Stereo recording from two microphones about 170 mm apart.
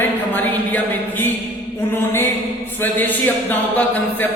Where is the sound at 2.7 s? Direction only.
10° left (ahead or behind).